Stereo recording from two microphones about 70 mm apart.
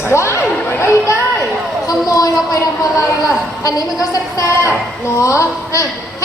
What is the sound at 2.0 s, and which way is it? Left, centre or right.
Speech, left.